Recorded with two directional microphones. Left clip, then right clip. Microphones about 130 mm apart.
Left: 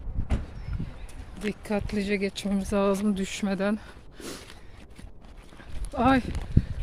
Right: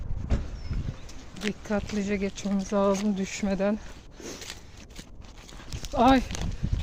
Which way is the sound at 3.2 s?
25° left (ahead or behind).